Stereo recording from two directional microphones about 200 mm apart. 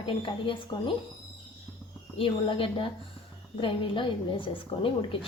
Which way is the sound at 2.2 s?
25° left (ahead or behind).